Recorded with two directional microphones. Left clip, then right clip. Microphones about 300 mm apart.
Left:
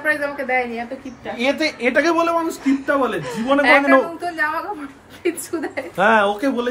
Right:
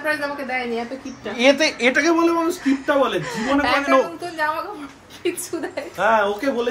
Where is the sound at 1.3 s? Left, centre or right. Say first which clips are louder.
Right 4 dB; right.